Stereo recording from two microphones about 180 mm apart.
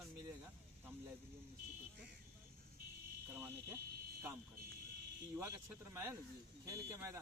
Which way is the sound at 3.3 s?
15° right (ahead or behind).